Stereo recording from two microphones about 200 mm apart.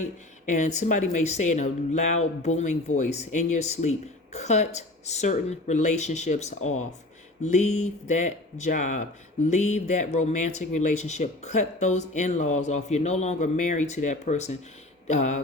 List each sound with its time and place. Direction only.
0.0 s speech: 40° left (ahead or behind)
6.6 s speech: 90° left
7.4 s speech: 35° left (ahead or behind)